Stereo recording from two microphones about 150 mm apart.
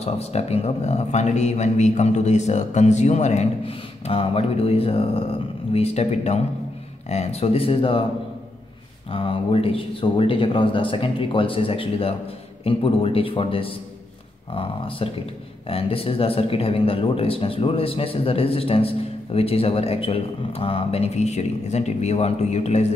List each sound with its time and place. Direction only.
0.0 s a man's voice: 45° left (ahead or behind)
9.1 s a man's voice: 35° left (ahead or behind)